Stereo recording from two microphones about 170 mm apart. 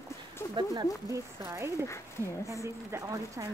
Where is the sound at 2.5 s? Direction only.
20° right (ahead or behind).